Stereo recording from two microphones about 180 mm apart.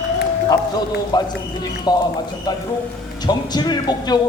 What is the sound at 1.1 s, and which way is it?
A man's voice, 25° left (ahead or behind).